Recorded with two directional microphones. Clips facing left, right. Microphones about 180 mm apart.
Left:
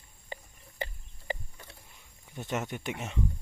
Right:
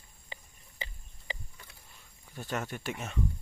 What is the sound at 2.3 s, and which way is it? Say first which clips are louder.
Speech: left 2 dB; 20° left (ahead or behind).